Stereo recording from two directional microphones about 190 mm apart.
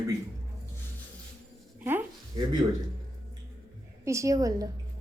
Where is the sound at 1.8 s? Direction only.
10° right (ahead or behind).